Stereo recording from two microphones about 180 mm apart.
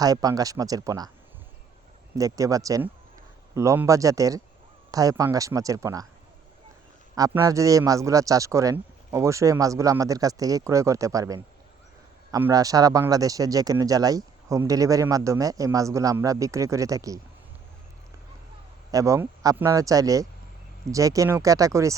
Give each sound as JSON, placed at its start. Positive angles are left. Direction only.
{"t": 0.0, "sound": "speech", "side_deg": -20}
{"t": 2.1, "sound": "a man's voice", "side_deg": -20}
{"t": 7.2, "sound": "a man's voice", "side_deg": -20}
{"t": 18.9, "sound": "a man's voice", "side_deg": -20}